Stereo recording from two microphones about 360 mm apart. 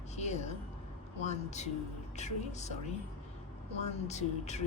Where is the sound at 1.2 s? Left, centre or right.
Centre.